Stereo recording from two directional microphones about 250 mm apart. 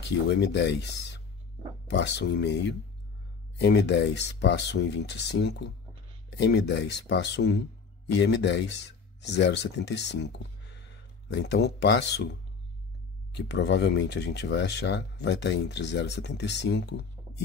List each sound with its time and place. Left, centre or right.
0.0 s speech: left
13.4 s speech: left